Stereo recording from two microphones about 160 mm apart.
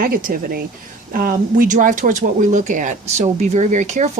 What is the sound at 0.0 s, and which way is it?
Speech, 60° right (ahead or behind).